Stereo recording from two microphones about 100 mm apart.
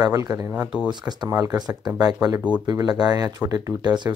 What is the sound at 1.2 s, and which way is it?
Speech, 35° right (ahead or behind).